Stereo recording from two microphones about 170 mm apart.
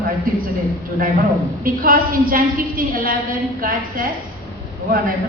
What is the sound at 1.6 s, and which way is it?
A woman's voice, 55° right (ahead or behind).